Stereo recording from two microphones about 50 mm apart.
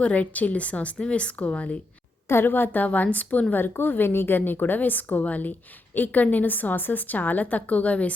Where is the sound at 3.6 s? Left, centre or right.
Left.